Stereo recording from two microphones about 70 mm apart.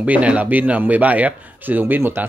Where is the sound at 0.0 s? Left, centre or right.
Centre.